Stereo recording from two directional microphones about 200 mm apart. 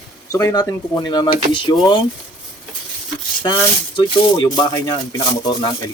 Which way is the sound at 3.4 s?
20° left (ahead or behind).